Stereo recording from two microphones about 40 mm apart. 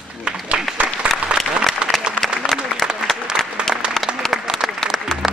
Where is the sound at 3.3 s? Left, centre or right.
Centre.